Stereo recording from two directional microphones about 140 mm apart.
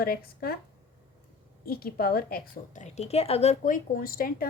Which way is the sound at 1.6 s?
90° left.